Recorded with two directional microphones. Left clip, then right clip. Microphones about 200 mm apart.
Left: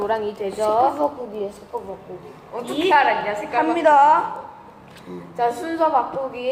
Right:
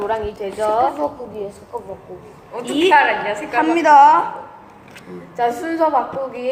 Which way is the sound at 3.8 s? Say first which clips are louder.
Right 4 dB; 40° right (ahead or behind).